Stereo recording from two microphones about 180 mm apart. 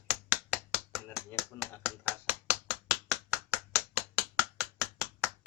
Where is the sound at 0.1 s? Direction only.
5° right (ahead or behind).